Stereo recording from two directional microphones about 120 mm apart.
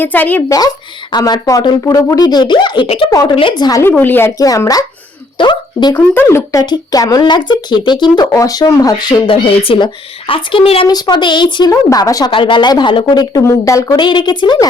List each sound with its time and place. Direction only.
0.0 s speech: 15° left (ahead or behind)
0.4 s speech: 30° left (ahead or behind); by 3.1 s 50° left (ahead or behind)
3.1 s speech: 30° left (ahead or behind)
3.8 s speech: 15° left (ahead or behind)
4.4 s speech: 30° left (ahead or behind)
5.4 s speech: 40° left (ahead or behind)
5.9 s speech: 20° left (ahead or behind); by 8.3 s 40° left (ahead or behind)
8.3 s speech: 30° left (ahead or behind)
9.3 s a woman's voice: 50° left (ahead or behind)
10.8 s speech: 35° left (ahead or behind)
11.7 s speech: 25° left (ahead or behind)
12.3 s speech: 45° left (ahead or behind); by 14.0 s 30° left (ahead or behind)
14.0 s speech: 40° left (ahead or behind)